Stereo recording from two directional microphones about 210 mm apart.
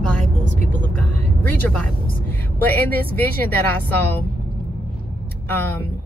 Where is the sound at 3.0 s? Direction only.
45° right (ahead or behind).